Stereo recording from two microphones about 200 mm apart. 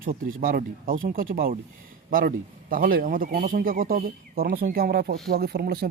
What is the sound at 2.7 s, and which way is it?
Speech, 45° right (ahead or behind).